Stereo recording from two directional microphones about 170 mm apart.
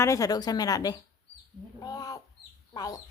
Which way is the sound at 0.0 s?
20° left (ahead or behind).